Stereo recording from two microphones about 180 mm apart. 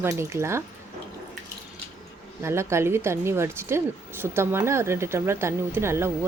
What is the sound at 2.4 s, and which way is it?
A woman's voice, 15° right (ahead or behind).